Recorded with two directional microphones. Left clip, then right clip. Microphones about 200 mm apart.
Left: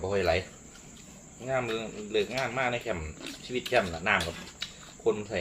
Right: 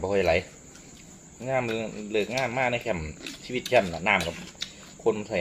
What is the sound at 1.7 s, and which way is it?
A man's voice, 30° right (ahead or behind).